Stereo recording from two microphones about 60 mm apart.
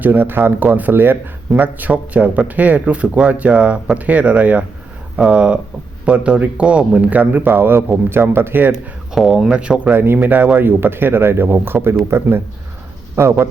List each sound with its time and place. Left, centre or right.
0.0 s speech: right
9.1 s speech: centre
9.9 s speech: right
13.2 s speech: right